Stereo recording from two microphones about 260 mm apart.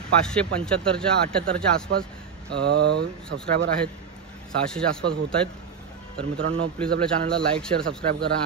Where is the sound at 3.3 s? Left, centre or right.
Right.